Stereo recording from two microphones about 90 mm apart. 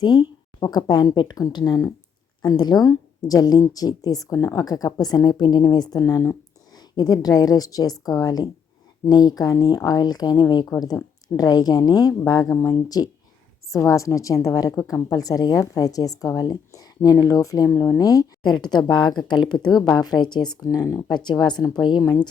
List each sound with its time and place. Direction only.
0.0 s speech: 50° left (ahead or behind)
1.4 s speech: 45° left (ahead or behind)
10.7 s speech: 25° left (ahead or behind)
11.3 s a woman's voice: 45° left (ahead or behind)
17.7 s speech: 30° left (ahead or behind)
18.0 s speech: 45° left (ahead or behind)
21.2 s speech: 50° left (ahead or behind)